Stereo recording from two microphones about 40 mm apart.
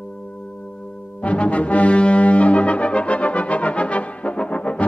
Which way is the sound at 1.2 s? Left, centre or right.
Left.